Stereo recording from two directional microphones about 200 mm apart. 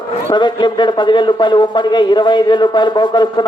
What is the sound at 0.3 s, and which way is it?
Speech, 25° left (ahead or behind).